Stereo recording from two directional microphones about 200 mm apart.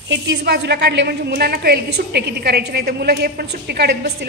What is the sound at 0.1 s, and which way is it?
A woman's voice, 60° right (ahead or behind).